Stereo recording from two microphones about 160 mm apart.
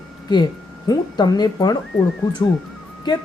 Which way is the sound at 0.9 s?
25° left (ahead or behind).